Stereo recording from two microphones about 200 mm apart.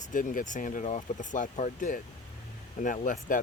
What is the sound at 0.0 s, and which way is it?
Speech, 40° left (ahead or behind).